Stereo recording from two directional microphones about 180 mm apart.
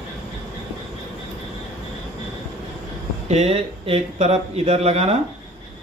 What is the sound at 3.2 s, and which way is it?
Speech, 35° right (ahead or behind).